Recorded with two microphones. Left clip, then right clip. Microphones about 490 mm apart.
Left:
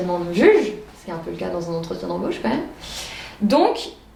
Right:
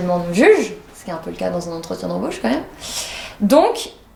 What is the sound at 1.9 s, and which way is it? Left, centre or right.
Speech, right.